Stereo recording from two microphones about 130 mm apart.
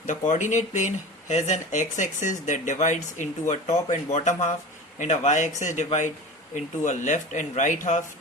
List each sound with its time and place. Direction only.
0.1 s speech: 75° left (ahead or behind)